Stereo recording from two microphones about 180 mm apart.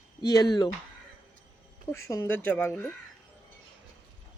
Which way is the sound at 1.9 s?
15° left (ahead or behind).